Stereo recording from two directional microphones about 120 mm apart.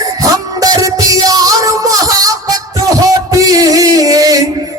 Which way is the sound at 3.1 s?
30° right (ahead or behind).